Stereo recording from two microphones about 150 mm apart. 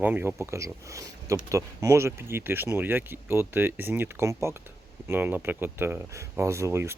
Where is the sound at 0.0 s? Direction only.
10° right (ahead or behind).